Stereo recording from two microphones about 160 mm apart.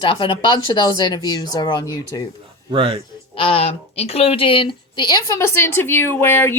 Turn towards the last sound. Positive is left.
turn(degrees=15)  # may be behind; listen again after turning